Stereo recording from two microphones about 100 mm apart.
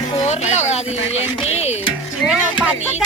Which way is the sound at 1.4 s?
90° left.